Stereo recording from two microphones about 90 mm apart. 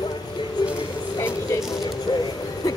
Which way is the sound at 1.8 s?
50° left (ahead or behind).